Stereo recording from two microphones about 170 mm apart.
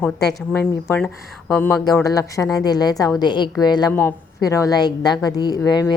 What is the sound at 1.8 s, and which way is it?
A woman's voice, 20° left (ahead or behind).